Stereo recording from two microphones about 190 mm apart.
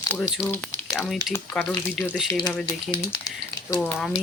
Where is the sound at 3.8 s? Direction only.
Centre (ahead or behind).